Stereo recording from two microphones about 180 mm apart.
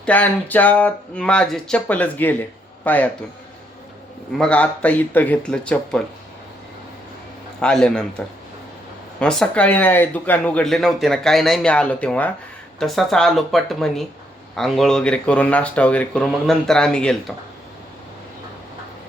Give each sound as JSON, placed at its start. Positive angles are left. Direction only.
{"t": 0.0, "sound": "speech", "side_deg": 10}
{"t": 4.3, "sound": "speech", "side_deg": 5}
{"t": 7.6, "sound": "speech", "side_deg": 5}
{"t": 9.2, "sound": "speech", "side_deg": 5}